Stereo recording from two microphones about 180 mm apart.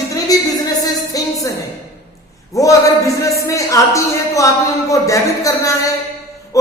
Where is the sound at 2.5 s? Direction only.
15° left (ahead or behind).